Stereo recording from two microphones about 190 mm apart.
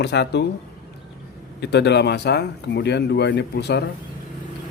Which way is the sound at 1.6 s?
65° left (ahead or behind).